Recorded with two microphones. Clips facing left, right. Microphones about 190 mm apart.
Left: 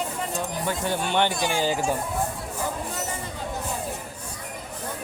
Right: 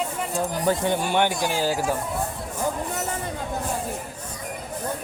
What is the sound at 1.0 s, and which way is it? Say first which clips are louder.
Speech: right 1 dB; 10° right (ahead or behind).